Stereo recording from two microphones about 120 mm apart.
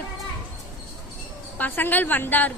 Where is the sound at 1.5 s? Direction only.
15° left (ahead or behind).